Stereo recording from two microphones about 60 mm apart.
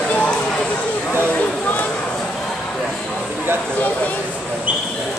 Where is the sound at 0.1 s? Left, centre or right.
Centre.